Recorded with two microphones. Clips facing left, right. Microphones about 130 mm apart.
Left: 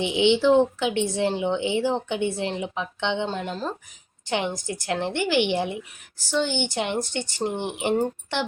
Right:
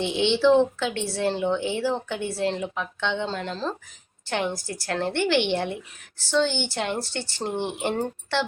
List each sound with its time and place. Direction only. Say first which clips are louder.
0.0 s a woman's voice: left 1 dB; 15° left (ahead or behind)